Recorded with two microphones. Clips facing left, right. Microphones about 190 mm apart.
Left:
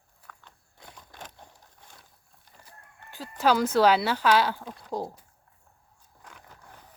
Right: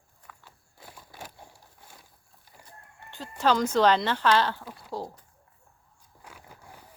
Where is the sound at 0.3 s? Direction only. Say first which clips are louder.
Even; 5° right (ahead or behind).